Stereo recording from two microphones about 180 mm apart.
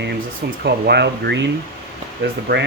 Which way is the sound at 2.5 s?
55° right (ahead or behind).